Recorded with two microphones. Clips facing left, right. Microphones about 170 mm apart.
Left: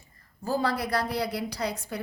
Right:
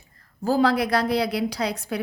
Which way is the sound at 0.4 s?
90° right.